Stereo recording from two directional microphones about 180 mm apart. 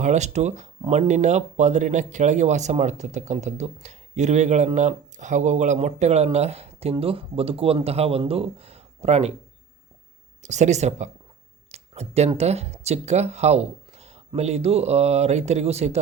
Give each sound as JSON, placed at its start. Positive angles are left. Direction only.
{"t": 0.0, "sound": "speech", "side_deg": -40}
{"t": 10.4, "sound": "speech", "side_deg": -40}